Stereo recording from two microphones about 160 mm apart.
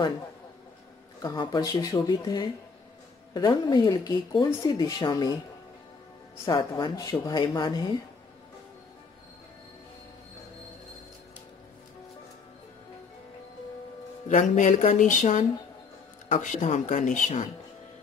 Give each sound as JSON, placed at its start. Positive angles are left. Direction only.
{"t": 1.2, "sound": "speech", "side_deg": 25}
{"t": 6.4, "sound": "speech", "side_deg": 20}
{"t": 14.2, "sound": "speech", "side_deg": 50}